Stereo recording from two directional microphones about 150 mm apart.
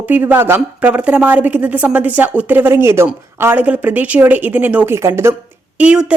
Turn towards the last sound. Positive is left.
turn(degrees=-10)  # may be behind; listen again after turning